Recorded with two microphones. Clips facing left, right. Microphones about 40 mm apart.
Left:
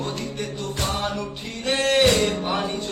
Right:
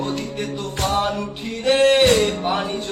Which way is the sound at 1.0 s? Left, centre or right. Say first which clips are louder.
Right 5 dB; centre.